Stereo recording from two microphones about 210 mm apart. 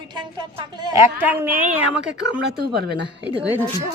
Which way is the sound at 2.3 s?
50° right (ahead or behind).